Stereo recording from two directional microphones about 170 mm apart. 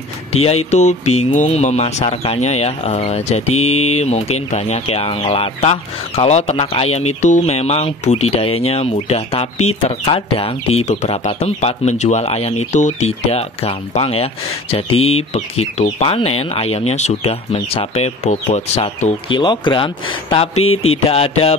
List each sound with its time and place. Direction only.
0.3 s speech: 35° left (ahead or behind)